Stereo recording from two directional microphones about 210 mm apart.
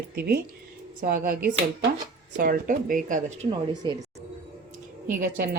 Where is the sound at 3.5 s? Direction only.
20° right (ahead or behind).